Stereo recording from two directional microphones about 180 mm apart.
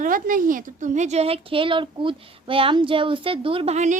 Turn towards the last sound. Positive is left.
turn(degrees=-40)  # may be behind; listen again after turning